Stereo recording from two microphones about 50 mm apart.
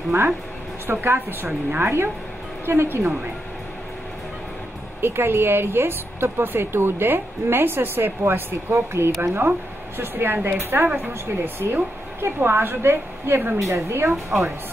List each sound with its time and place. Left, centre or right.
0.8 s speech: right
5.0 s speech: right
8.7 s speech: right
13.6 s a woman's voice: right
14.3 s a woman's voice: centre